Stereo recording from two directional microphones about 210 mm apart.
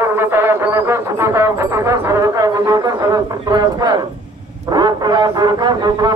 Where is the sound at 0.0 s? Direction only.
10° right (ahead or behind).